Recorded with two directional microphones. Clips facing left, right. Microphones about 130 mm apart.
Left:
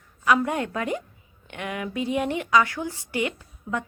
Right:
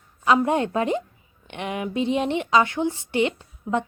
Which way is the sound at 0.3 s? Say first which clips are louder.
Right 3 dB; 25° right (ahead or behind).